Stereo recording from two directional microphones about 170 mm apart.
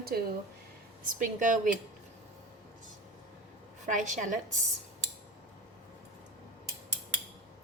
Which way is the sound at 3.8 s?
45° right (ahead or behind).